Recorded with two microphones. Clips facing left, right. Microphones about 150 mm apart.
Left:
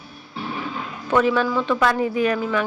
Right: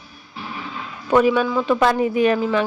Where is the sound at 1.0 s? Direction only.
15° right (ahead or behind).